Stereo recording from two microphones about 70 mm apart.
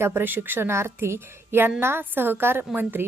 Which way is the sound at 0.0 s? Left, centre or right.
Right.